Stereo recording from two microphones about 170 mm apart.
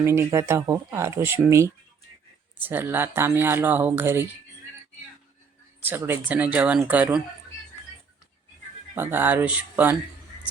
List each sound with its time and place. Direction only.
0.0 s speech: 15° right (ahead or behind)
5.8 s speech: 10° right (ahead or behind)
9.0 s speech: 10° right (ahead or behind)